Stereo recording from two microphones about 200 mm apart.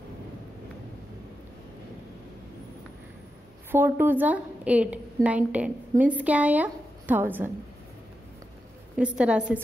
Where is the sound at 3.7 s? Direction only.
10° right (ahead or behind).